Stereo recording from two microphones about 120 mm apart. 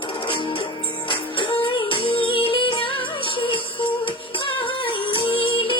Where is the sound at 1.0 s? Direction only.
45° left (ahead or behind).